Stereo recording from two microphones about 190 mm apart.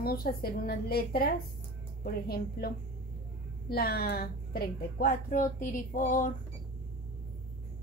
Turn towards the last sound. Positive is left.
turn(degrees=45)  # may be behind; listen again after turning